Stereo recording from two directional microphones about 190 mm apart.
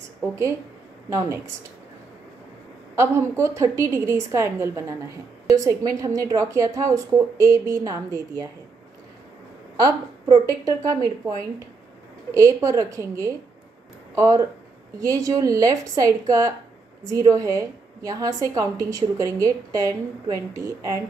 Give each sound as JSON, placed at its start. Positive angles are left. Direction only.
{"t": 3.0, "sound": "a woman's voice", "side_deg": -15}
{"t": 9.8, "sound": "speech", "side_deg": -20}
{"t": 12.4, "sound": "a woman's voice", "side_deg": -15}